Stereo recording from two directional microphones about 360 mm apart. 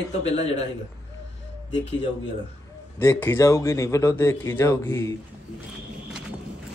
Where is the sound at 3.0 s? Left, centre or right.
Centre.